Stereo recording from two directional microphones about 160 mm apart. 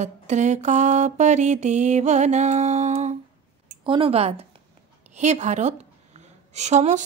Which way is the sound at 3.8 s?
35° right (ahead or behind).